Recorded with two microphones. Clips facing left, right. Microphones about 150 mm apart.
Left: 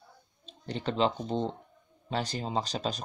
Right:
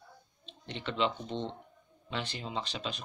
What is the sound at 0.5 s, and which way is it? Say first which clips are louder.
Speech: left 5 dB; 40° left (ahead or behind).